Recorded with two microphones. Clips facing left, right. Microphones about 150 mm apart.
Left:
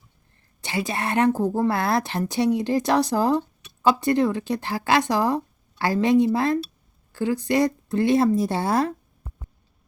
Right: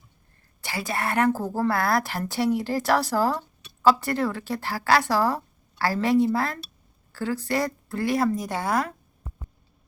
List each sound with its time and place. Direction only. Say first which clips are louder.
0.6 s a woman's voice: left 2 dB; 20° left (ahead or behind)